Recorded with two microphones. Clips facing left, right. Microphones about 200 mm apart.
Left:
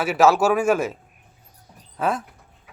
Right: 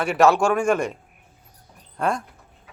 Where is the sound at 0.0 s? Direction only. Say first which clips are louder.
Even; centre (ahead or behind).